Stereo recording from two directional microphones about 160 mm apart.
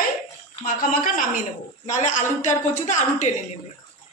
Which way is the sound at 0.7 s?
55° left (ahead or behind).